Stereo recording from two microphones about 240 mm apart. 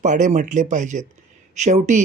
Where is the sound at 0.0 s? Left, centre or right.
Right.